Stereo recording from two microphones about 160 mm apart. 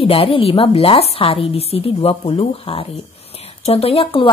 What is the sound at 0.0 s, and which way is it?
Speech, 35° left (ahead or behind).